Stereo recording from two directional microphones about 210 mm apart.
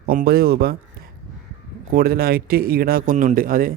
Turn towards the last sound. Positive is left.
turn(degrees=-40)  # may be behind; listen again after turning